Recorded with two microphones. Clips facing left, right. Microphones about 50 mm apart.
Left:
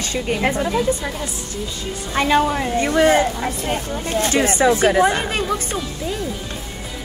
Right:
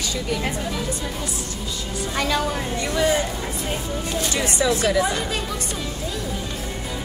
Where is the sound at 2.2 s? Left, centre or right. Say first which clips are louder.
Left 7 dB; left.